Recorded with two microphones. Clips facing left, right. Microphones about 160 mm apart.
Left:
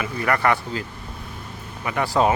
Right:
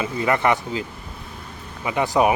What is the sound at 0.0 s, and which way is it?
Speech, 20° right (ahead or behind).